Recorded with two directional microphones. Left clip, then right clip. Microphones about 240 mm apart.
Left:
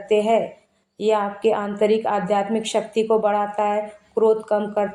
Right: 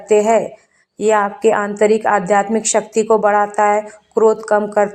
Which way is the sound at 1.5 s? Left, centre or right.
Right.